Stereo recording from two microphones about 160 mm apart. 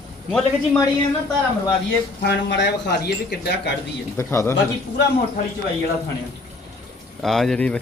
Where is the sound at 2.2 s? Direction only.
90° left.